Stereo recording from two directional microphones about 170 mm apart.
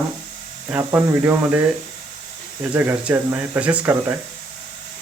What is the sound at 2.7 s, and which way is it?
Speech, 10° right (ahead or behind).